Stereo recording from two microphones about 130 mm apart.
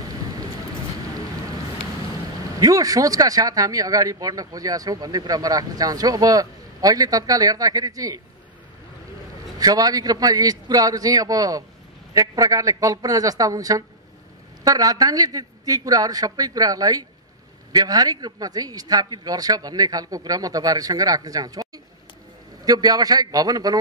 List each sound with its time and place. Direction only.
2.6 s speech: 30° right (ahead or behind)
9.6 s speech: 30° right (ahead or behind)